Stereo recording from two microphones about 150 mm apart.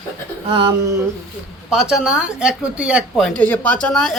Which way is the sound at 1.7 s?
5° right (ahead or behind).